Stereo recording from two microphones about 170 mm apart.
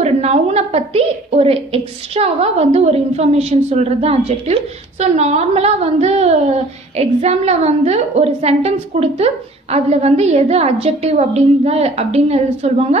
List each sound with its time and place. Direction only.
0.0 s a woman's voice: 40° right (ahead or behind)